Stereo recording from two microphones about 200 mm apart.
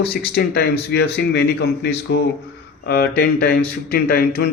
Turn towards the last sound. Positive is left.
turn(degrees=50)  # may be behind; listen again after turning